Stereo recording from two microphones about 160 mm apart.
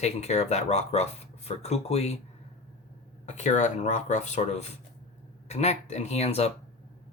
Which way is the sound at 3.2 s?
50° left (ahead or behind).